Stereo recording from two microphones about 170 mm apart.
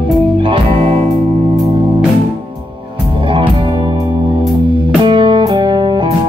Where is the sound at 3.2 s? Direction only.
30° right (ahead or behind).